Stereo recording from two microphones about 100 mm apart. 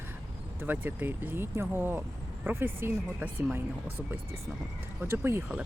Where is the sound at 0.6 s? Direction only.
20° right (ahead or behind).